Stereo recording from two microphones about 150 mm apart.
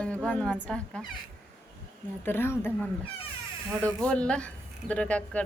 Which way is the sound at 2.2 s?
15° left (ahead or behind).